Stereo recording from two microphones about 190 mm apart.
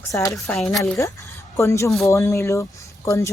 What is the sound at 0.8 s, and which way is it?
Speech, 15° left (ahead or behind).